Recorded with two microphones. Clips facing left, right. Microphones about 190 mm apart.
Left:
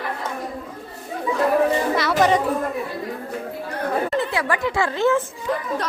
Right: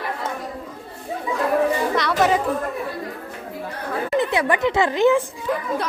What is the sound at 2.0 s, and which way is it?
Music, centre (ahead or behind).